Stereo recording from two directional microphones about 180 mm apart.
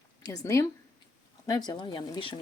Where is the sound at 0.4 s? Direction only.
15° left (ahead or behind).